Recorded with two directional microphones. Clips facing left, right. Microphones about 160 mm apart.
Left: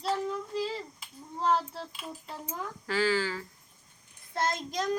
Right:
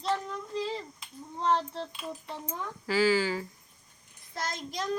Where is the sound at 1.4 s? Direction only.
5° left (ahead or behind).